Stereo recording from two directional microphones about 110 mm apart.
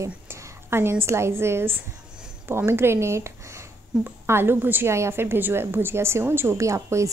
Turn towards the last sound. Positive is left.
turn(degrees=-25)  # may be behind; listen again after turning